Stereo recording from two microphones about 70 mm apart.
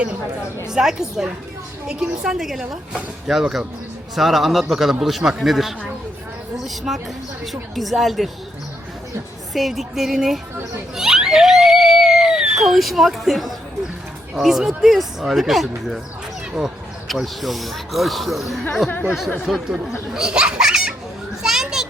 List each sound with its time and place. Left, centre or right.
0.7 s speech: centre
6.9 s speech: centre
9.5 s speech: centre
10.9 s screaming: centre
14.3 s speech: centre
18.9 s speech: left
19.5 s speech: centre
21.4 s children playing: centre